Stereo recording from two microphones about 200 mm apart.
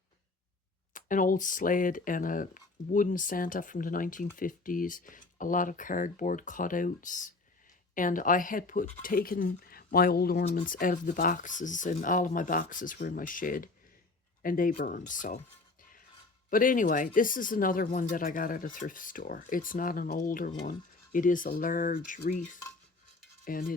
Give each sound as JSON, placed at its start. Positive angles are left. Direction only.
{"t": 0.9, "sound": "speech", "side_deg": 40}
{"t": 16.5, "sound": "speech", "side_deg": 45}
{"t": 23.5, "sound": "speech", "side_deg": 45}